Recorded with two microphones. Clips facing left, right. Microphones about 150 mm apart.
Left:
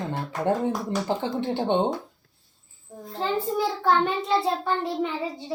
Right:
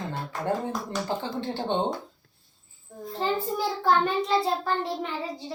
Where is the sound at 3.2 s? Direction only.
Centre (ahead or behind).